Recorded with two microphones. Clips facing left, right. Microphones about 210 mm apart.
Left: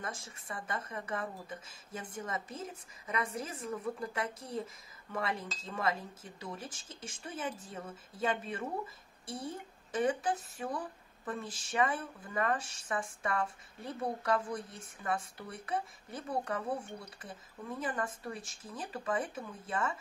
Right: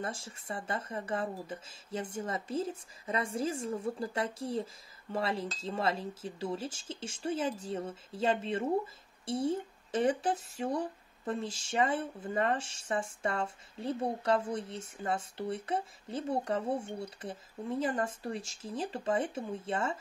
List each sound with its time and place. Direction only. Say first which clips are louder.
0.0 s speech: right 4 dB; 30° right (ahead or behind)